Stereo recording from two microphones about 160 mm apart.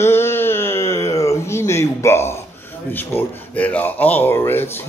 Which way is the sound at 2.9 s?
10° left (ahead or behind).